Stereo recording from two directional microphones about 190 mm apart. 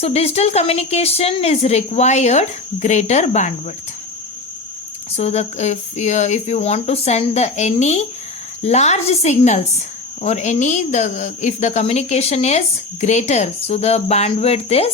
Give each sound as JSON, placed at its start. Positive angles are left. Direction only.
{"t": 0.0, "sound": "speech", "side_deg": 35}
{"t": 5.1, "sound": "speech", "side_deg": 35}